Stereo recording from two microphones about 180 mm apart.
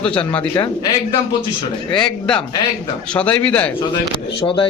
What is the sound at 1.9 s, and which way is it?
A man's voice, 5° left (ahead or behind).